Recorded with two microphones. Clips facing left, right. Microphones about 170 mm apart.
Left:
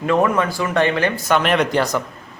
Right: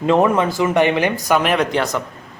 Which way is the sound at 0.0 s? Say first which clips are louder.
Right 2 dB; 20° right (ahead or behind).